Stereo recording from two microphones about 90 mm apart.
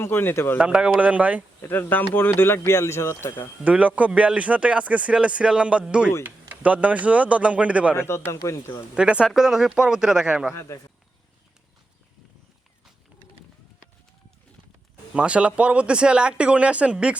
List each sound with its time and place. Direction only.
0.0 s speech: 25° left (ahead or behind)
0.6 s a man's voice: 10° right (ahead or behind)
1.6 s speech: 25° left (ahead or behind)
3.6 s a man's voice: 15° right (ahead or behind)
7.9 s speech: 30° left (ahead or behind)
9.0 s a man's voice: 10° right (ahead or behind)
10.5 s speech: 30° left (ahead or behind)
15.1 s a man's voice: 15° right (ahead or behind)